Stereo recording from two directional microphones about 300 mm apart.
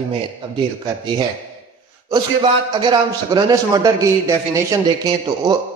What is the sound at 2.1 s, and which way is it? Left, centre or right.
A man's voice, centre.